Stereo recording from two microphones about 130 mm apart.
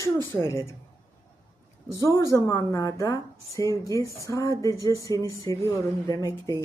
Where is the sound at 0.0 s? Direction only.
20° left (ahead or behind).